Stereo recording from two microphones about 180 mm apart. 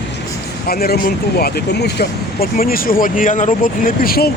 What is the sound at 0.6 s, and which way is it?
Speech, 60° left (ahead or behind).